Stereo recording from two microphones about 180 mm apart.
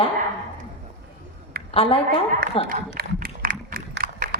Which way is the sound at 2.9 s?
55° right (ahead or behind).